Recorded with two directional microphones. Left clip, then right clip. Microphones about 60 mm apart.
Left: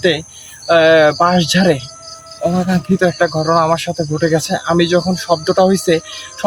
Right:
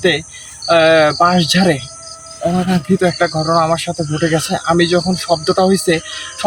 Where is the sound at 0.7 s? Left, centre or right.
Centre.